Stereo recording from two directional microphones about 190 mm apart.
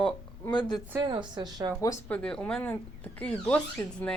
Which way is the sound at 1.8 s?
15° left (ahead or behind).